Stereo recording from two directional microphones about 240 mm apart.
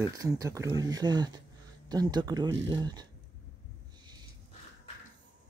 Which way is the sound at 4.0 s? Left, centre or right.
Centre.